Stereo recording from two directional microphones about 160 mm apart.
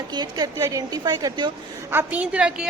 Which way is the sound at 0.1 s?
25° right (ahead or behind).